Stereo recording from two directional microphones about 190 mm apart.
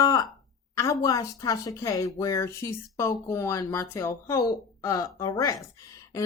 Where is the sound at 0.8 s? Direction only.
15° left (ahead or behind).